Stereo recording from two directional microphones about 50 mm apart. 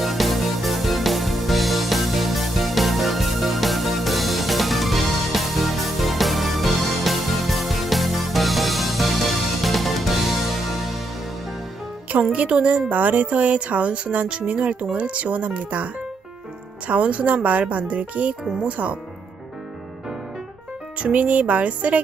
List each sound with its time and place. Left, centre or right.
0.0 s music: centre
12.3 s speech: right
21.0 s speech: right